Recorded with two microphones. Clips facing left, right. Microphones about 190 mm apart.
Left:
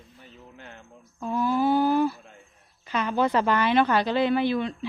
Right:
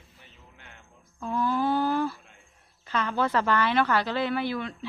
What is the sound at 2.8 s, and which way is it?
A woman's voice, 15° left (ahead or behind).